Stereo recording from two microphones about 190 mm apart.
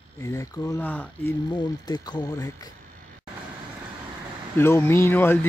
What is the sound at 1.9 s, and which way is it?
Speech, 20° left (ahead or behind).